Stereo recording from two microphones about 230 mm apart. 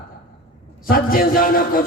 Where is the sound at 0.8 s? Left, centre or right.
Left.